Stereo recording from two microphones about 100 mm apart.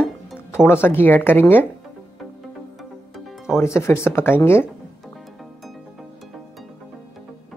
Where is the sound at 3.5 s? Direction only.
25° left (ahead or behind).